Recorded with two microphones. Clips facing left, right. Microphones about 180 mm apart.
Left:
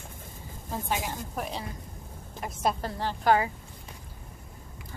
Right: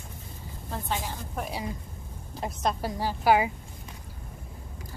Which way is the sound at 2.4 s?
25° right (ahead or behind).